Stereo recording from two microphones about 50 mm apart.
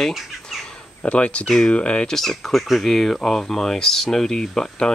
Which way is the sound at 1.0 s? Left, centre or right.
Left.